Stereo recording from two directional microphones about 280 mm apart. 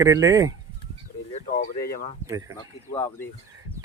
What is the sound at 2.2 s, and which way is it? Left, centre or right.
Speech, centre.